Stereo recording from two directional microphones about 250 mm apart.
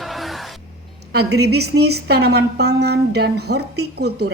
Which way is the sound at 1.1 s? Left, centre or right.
Right.